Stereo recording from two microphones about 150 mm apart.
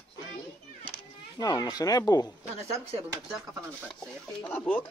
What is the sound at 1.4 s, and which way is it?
Speech, 25° left (ahead or behind).